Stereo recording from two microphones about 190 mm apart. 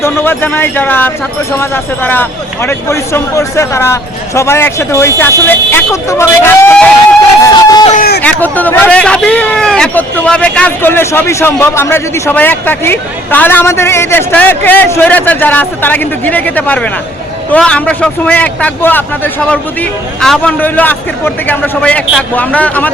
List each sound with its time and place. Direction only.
0.0 s speech: 10° left (ahead or behind)
7.4 s a sound: 20° left (ahead or behind)
8.2 s speech: 10° left (ahead or behind)